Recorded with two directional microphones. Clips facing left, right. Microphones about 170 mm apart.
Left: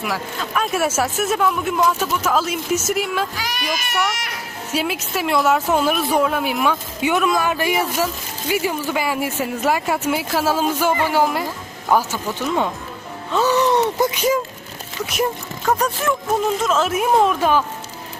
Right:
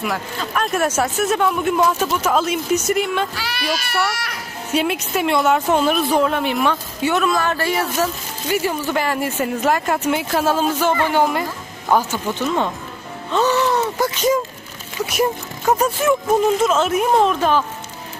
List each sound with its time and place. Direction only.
0.0 s speech: centre (ahead or behind)
3.3 s speech: 15° left (ahead or behind)
4.7 s speech: centre (ahead or behind)
13.3 s music: 10° left (ahead or behind)
13.7 s a sound: 20° left (ahead or behind)
16.1 s speech: centre (ahead or behind)